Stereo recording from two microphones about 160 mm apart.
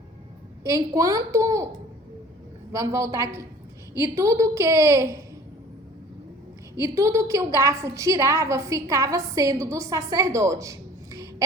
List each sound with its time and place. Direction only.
0.6 s a woman's voice: 20° right (ahead or behind)
2.7 s a woman's voice: 20° right (ahead or behind)
6.7 s a woman's voice: 20° right (ahead or behind)